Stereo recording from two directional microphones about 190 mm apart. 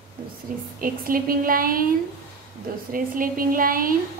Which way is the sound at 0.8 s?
50° right (ahead or behind).